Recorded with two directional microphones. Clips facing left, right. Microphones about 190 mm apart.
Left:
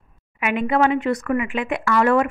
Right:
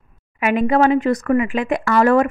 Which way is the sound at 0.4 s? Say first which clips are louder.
Right 4 dB; 40° right (ahead or behind).